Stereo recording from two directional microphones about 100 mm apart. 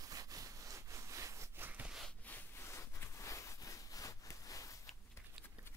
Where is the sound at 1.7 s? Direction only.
15° right (ahead or behind).